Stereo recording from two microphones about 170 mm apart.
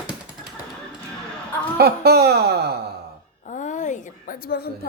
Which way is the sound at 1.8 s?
70° right (ahead or behind).